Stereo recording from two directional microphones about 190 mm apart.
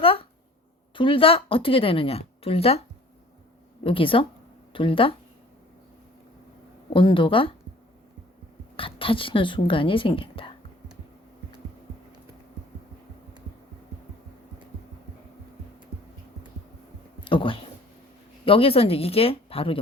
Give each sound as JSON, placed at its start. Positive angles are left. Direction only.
{"t": 0.0, "sound": "a sound", "side_deg": 30}
{"t": 0.9, "sound": "a woman's voice", "side_deg": 25}
{"t": 3.8, "sound": "a woman's voice", "side_deg": 25}
{"t": 6.9, "sound": "a woman's voice", "side_deg": 25}
{"t": 8.7, "sound": "a woman's voice", "side_deg": 30}
{"t": 17.2, "sound": "a sound", "side_deg": 25}
{"t": 18.4, "sound": "a woman's voice", "side_deg": 30}